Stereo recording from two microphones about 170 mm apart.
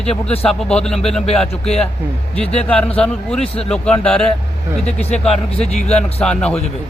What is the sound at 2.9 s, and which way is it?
Speech, 5° left (ahead or behind).